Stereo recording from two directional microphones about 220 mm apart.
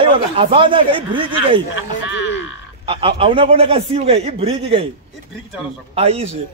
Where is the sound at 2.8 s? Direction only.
25° right (ahead or behind).